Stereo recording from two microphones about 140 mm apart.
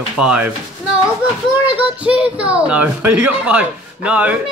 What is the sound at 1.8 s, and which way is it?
Speech, 10° right (ahead or behind).